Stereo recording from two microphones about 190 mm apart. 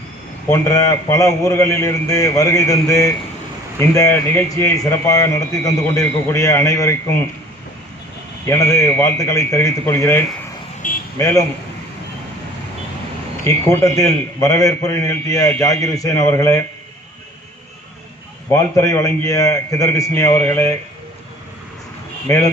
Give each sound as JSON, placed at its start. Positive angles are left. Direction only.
{"t": 0.5, "sound": "speech", "side_deg": 15}
{"t": 8.4, "sound": "speech", "side_deg": 15}
{"t": 10.8, "sound": "a sound", "side_deg": 45}
{"t": 11.2, "sound": "speech", "side_deg": 15}
{"t": 13.4, "sound": "speech", "side_deg": 15}
{"t": 18.5, "sound": "speech", "side_deg": 15}
{"t": 22.3, "sound": "speech", "side_deg": 15}